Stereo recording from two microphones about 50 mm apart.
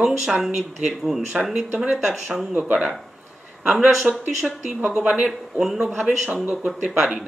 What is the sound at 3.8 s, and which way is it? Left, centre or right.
Speech, centre.